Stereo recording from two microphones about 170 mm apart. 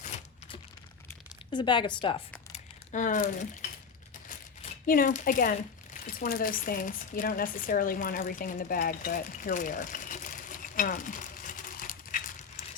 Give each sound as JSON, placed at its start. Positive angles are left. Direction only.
{"t": 1.5, "sound": "a woman's voice", "side_deg": 25}
{"t": 2.5, "sound": "crumpling", "side_deg": 50}
{"t": 4.3, "sound": "speech", "side_deg": 55}